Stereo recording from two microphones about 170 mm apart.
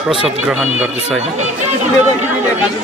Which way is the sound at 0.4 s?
5° right (ahead or behind).